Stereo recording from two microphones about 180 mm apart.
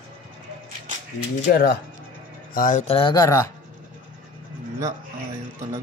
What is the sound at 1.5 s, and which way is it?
Speech, 60° left (ahead or behind).